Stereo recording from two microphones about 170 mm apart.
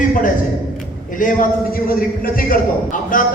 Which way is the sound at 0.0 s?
50° left (ahead or behind).